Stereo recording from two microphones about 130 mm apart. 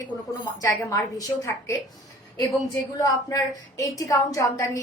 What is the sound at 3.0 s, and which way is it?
A woman's voice, 25° left (ahead or behind).